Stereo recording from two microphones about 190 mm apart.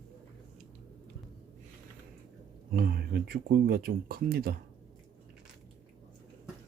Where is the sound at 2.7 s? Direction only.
50° right (ahead or behind).